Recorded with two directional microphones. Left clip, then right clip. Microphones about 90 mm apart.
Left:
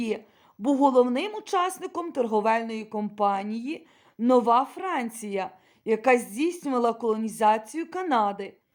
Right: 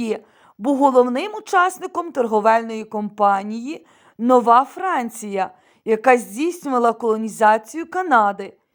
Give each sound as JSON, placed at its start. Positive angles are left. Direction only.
{"t": 0.6, "sound": "a woman's voice", "side_deg": -60}